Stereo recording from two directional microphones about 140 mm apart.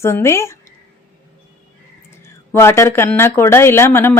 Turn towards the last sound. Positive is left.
turn(degrees=15)  # may be behind; listen again after turning